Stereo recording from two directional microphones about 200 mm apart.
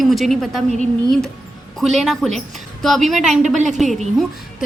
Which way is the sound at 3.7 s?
Centre (ahead or behind).